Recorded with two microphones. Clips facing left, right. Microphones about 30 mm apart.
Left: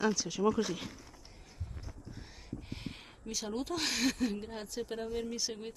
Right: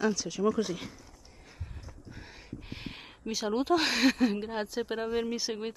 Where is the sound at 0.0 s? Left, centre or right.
Centre.